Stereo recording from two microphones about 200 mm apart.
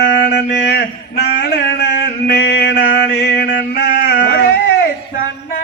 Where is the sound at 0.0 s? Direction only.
55° left (ahead or behind).